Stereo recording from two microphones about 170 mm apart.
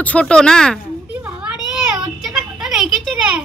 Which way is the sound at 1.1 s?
10° right (ahead or behind).